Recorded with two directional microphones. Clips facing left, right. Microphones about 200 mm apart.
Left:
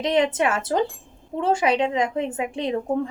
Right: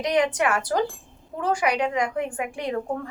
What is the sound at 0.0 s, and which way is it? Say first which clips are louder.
A woman's voice: left 2 dB; 25° left (ahead or behind).